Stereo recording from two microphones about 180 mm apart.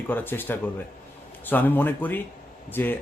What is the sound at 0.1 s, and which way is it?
Speech, 10° left (ahead or behind).